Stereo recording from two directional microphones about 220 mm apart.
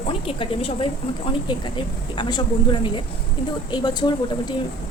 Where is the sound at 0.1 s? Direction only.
25° left (ahead or behind).